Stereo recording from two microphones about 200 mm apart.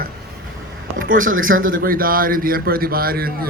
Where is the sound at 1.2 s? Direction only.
90° right.